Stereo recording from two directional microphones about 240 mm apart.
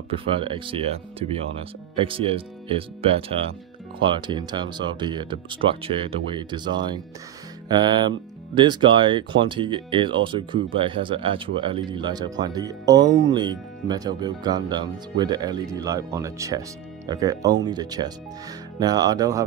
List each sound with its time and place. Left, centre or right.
0.3 s speech: right